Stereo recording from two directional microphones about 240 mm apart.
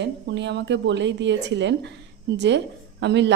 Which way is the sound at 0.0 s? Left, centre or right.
Right.